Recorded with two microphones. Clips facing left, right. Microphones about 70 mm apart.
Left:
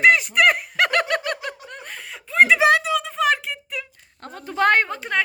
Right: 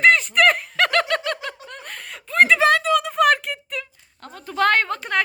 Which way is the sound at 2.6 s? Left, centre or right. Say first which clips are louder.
Even; centre.